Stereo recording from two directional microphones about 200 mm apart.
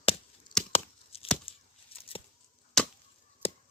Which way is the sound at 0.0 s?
30° left (ahead or behind).